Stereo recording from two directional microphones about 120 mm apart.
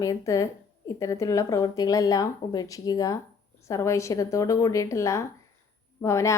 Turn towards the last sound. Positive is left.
turn(degrees=25)  # may be behind; listen again after turning